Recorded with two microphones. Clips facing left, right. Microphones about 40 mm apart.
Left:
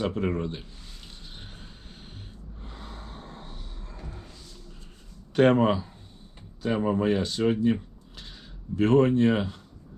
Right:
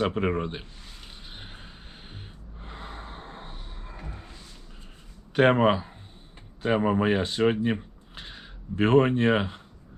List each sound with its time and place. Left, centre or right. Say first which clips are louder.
0.0 s speech: right 2 dB; right
1.0 s a sound: right 2 dB; right
2.6 s gasp: right 4 dB; right
5.3 s speech: even; right